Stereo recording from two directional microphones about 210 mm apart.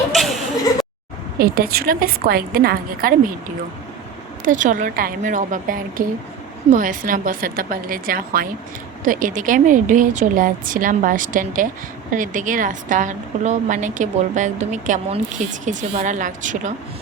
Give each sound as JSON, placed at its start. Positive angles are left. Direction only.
{"t": 1.4, "sound": "a woman's voice", "side_deg": -45}
{"t": 4.4, "sound": "a woman's voice", "side_deg": -40}